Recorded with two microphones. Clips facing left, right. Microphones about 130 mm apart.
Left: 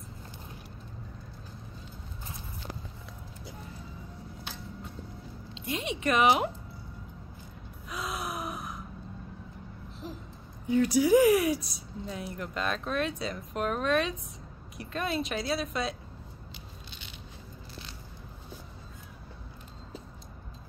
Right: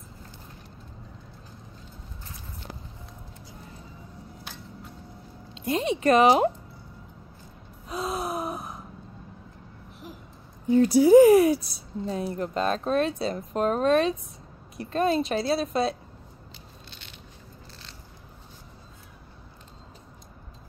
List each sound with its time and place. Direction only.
5.5 s speech: 40° right (ahead or behind)
7.9 s gasp: 30° right (ahead or behind)
10.7 s speech: 35° right (ahead or behind)